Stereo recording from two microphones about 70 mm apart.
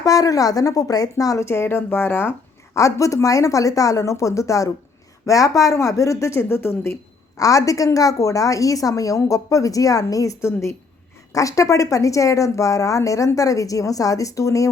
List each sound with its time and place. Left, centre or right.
0.0 s a woman's voice: left
1.5 s speech: left
3.0 s a woman's voice: left
6.5 s speech: left
7.3 s a woman's voice: left
10.4 s speech: left
11.3 s a woman's voice: left